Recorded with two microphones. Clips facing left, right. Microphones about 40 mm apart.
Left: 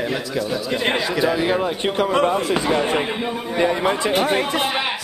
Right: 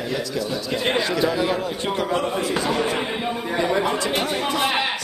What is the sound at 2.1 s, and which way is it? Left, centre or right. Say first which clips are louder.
Speech: left 4 dB; left.